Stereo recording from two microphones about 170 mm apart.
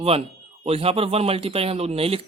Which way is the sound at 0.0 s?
35° right (ahead or behind).